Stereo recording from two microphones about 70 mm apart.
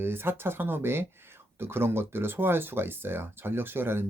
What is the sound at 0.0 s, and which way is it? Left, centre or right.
Speech, right.